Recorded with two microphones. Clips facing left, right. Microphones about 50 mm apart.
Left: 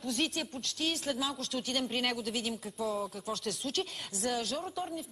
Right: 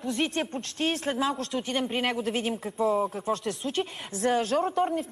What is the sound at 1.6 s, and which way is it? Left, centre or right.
Speech, right.